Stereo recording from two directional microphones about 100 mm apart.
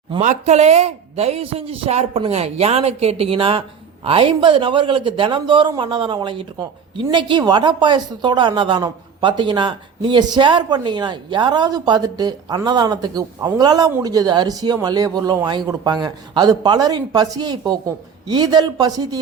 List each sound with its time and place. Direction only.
0.1 s a woman's voice: 90° right; by 19.2 s 40° right (ahead or behind)